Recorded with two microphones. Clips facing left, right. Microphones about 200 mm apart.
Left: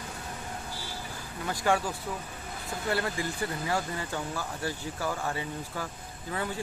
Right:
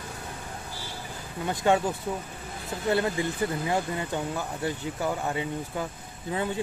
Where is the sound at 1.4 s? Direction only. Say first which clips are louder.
Right 4 dB; 25° right (ahead or behind).